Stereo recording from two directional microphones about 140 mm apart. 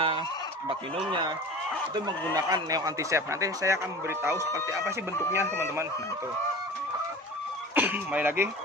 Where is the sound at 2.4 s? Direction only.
25° right (ahead or behind).